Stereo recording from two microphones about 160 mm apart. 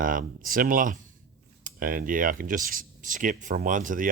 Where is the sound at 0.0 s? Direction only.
60° right (ahead or behind).